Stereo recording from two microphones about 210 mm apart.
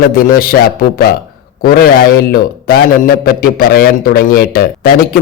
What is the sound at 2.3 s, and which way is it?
A man's voice, 45° left (ahead or behind).